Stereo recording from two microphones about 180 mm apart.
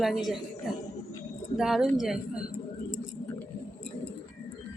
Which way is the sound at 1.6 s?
Centre (ahead or behind).